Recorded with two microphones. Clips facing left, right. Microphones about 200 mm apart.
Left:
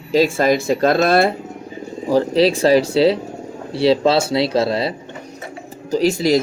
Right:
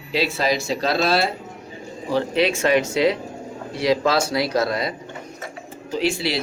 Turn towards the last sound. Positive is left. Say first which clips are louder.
# left 7 dB
turn(degrees=45)  # may be behind; listen again after turning